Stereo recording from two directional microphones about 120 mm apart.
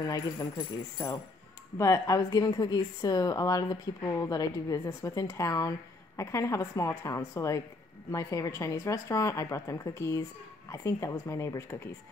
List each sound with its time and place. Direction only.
0.1 s a woman's voice: 30° left (ahead or behind)